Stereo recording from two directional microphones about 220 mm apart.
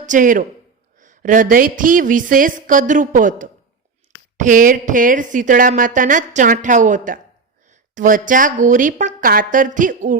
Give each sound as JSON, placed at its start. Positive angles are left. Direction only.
{"t": 0.0, "sound": "speech", "side_deg": -35}